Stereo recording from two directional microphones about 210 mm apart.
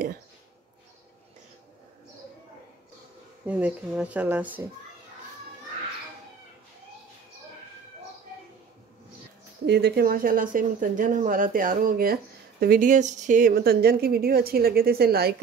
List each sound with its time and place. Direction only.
3.4 s speech: 5° right (ahead or behind)
9.7 s speech: 50° right (ahead or behind)